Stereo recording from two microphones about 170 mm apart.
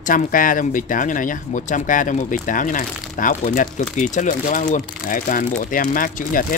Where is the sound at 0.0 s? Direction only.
55° left (ahead or behind).